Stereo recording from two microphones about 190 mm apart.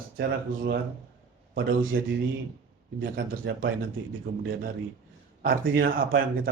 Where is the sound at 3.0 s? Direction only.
55° right (ahead or behind).